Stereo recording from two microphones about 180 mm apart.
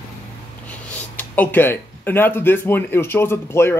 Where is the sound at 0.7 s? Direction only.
10° left (ahead or behind).